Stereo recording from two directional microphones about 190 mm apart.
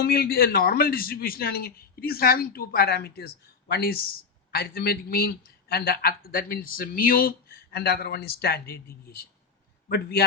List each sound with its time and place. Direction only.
0.0 s speech: 55° left (ahead or behind)